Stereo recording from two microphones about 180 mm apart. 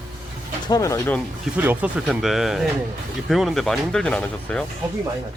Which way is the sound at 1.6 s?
10° right (ahead or behind).